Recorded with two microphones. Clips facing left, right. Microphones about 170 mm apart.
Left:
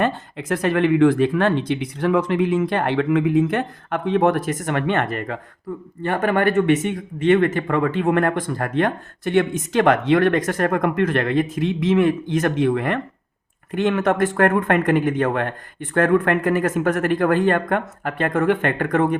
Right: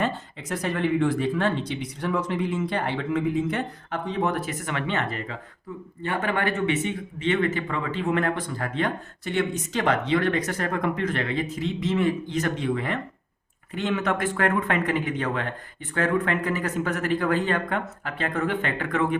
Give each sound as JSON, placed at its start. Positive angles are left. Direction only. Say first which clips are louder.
{"t": 0.0, "sound": "speech", "louder": "left 6 dB", "side_deg": 60}